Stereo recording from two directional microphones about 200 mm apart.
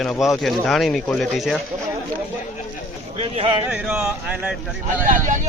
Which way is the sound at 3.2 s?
30° right (ahead or behind).